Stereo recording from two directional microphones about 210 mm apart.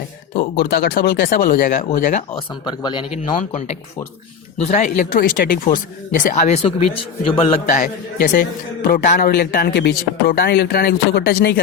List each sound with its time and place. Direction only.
0.6 s a man's voice: 50° left (ahead or behind)
2.6 s speech: 20° left (ahead or behind)
4.7 s a man's voice: 35° left (ahead or behind)
8.3 s a man's voice: 40° left (ahead or behind)